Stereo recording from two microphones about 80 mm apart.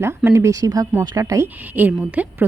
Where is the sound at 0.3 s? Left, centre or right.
Right.